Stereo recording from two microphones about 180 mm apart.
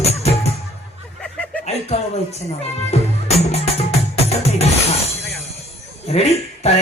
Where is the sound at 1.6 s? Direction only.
35° left (ahead or behind).